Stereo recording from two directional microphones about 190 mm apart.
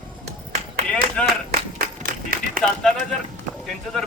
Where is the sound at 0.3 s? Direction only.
35° right (ahead or behind).